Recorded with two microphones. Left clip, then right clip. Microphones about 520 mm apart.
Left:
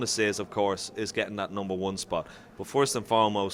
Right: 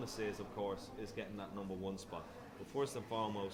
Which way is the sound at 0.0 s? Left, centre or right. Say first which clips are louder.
Left 15 dB; left.